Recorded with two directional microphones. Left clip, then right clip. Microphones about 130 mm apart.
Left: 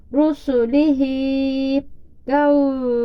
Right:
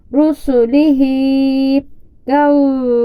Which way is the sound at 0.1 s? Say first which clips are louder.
Right 5 dB; 55° right (ahead or behind).